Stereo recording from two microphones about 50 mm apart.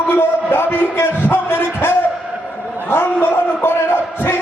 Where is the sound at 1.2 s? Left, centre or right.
Left.